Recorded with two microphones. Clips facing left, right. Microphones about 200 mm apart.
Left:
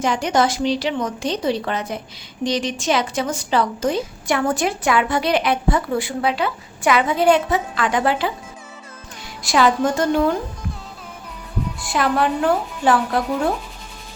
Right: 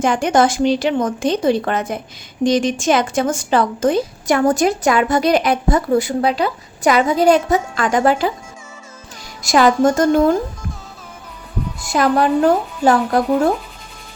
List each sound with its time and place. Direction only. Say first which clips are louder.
0.0 s a woman's voice: right 4 dB; 50° right (ahead or behind)
9.4 s a woman's voice: right 4 dB; 45° right (ahead or behind)
11.8 s speech: right 4 dB; 40° right (ahead or behind)